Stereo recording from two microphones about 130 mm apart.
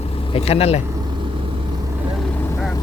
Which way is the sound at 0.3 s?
50° left (ahead or behind).